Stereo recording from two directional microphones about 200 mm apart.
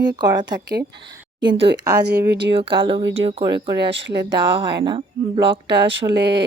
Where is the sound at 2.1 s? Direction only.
55° right (ahead or behind).